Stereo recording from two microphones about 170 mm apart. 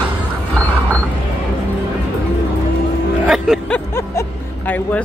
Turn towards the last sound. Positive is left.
turn(degrees=0)  # may be behind; listen again after turning